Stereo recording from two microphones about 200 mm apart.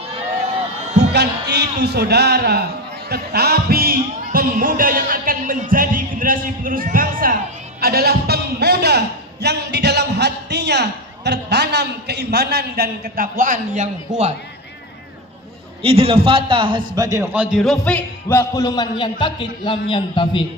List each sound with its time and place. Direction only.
0.9 s a man's voice: 55° right (ahead or behind)
7.8 s a sound: 50° right (ahead or behind)
15.8 s a man's voice: 30° right (ahead or behind); by 20.4 s 25° left (ahead or behind)